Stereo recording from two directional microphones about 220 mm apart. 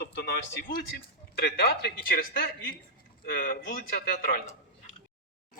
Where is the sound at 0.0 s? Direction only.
45° left (ahead or behind).